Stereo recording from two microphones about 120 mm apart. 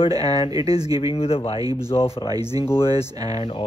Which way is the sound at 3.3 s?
60° left (ahead or behind).